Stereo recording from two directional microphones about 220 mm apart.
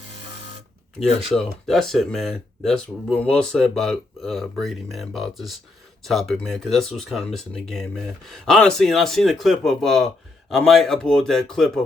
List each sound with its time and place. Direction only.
1.3 s speech: centre (ahead or behind)